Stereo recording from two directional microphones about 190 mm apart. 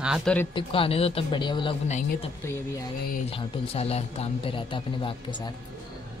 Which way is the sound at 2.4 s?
15° left (ahead or behind).